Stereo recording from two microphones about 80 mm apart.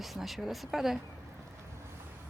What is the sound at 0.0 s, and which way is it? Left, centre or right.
Speech, centre.